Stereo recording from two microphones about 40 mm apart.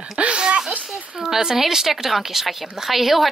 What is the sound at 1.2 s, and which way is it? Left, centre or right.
Speech, centre.